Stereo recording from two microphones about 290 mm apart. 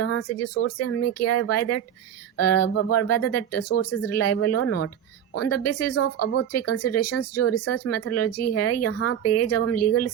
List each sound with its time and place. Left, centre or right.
0.0 s speech: left